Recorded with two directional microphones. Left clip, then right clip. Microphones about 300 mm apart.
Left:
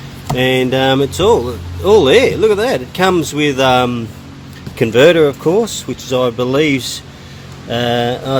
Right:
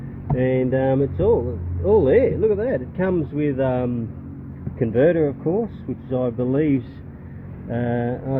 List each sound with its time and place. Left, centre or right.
0.3 s speech: left